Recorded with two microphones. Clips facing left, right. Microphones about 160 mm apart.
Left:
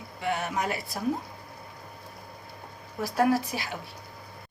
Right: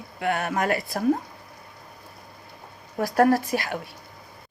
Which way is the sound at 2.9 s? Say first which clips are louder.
Right 5 dB; 55° right (ahead or behind).